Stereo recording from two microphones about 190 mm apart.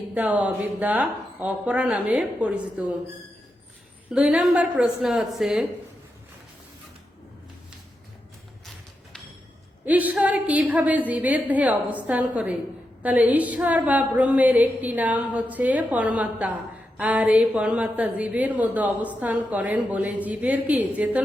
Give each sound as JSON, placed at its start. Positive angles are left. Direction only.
{"t": 0.1, "sound": "a woman's voice", "side_deg": -10}
{"t": 4.1, "sound": "a woman's voice", "side_deg": -5}
{"t": 9.8, "sound": "a woman's voice", "side_deg": -10}